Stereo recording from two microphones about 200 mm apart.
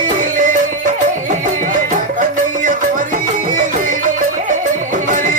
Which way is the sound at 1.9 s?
40° right (ahead or behind).